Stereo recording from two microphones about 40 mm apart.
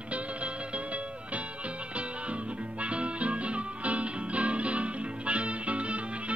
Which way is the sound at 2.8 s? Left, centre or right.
Right.